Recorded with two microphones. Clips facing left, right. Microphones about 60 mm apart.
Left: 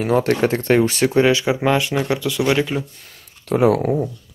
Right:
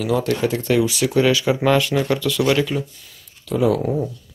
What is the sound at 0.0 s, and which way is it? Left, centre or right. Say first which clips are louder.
Speech: left 3 dB; left.